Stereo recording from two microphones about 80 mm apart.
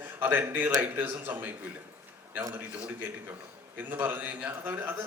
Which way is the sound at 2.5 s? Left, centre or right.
Centre.